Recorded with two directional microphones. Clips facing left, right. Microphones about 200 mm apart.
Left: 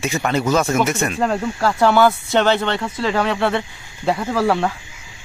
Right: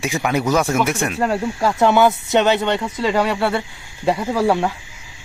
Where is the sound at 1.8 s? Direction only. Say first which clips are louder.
Even; 20° right (ahead or behind).